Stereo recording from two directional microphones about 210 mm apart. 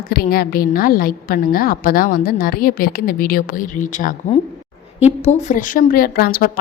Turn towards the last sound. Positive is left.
turn(degrees=45)  # may be behind; listen again after turning